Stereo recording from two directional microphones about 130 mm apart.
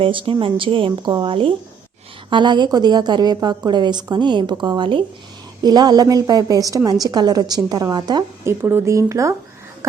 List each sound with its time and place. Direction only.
0.0 s a woman's voice: 40° right (ahead or behind)
8.4 s a woman's voice: 15° right (ahead or behind)